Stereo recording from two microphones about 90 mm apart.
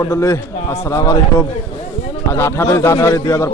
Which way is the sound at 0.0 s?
35° left (ahead or behind).